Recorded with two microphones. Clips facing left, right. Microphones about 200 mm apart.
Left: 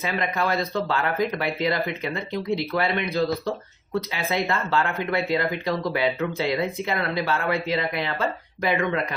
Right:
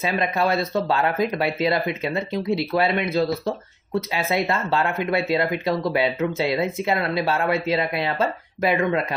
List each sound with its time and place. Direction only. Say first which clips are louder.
0.0 s speech: right 3 dB; 25° right (ahead or behind)